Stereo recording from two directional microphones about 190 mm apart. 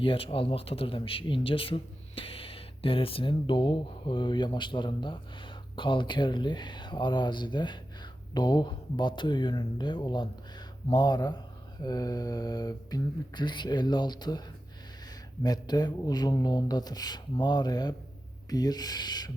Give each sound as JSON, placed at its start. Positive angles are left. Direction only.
{"t": 0.0, "sound": "speech", "side_deg": 30}
{"t": 15.4, "sound": "speech", "side_deg": 20}